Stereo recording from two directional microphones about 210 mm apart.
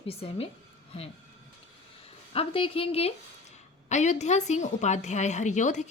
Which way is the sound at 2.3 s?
25° left (ahead or behind).